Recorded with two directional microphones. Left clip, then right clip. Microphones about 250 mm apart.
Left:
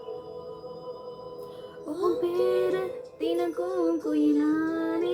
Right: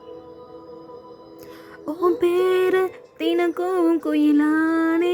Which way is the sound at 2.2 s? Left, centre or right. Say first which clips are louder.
Right 7 dB; right.